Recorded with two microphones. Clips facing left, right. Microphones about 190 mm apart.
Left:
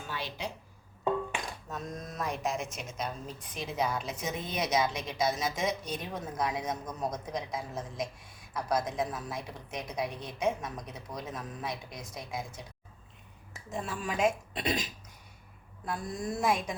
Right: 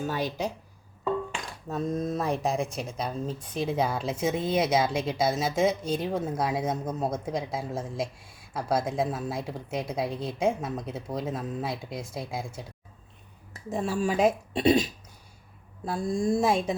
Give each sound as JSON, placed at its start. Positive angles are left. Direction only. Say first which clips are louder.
{"t": 0.1, "sound": "speech", "louder": "right 8 dB", "side_deg": -45}
{"t": 1.7, "sound": "speech", "louder": "right 12 dB", "side_deg": -30}
{"t": 13.7, "sound": "speech", "louder": "right 7 dB", "side_deg": -35}
{"t": 15.9, "sound": "speech", "louder": "right 9 dB", "side_deg": -25}